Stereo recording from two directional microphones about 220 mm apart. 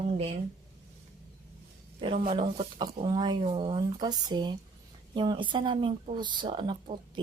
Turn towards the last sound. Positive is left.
turn(degrees=-25)  # may be behind; listen again after turning